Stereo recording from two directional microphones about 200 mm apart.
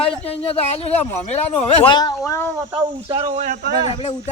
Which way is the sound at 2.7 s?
25° right (ahead or behind).